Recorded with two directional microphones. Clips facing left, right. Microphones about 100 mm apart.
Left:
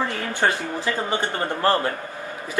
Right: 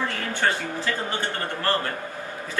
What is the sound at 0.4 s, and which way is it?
Speech, 25° left (ahead or behind).